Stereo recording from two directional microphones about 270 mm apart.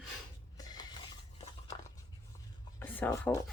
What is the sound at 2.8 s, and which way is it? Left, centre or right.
Speech, centre.